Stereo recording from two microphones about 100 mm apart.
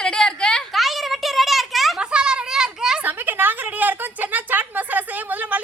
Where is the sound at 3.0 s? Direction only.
20° right (ahead or behind).